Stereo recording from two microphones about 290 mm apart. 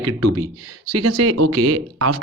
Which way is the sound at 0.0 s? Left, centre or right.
Right.